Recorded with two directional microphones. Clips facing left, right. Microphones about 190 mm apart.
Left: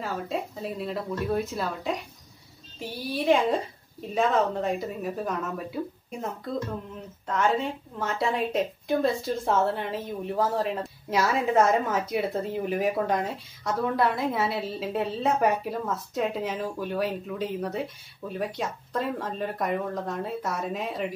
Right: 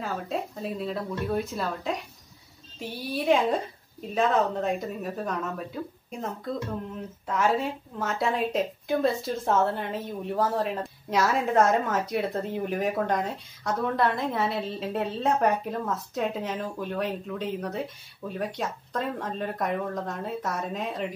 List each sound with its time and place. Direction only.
0.0 s a woman's voice: centre (ahead or behind)